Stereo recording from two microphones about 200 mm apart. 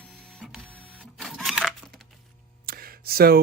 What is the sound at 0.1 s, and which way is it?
Printer, centre (ahead or behind).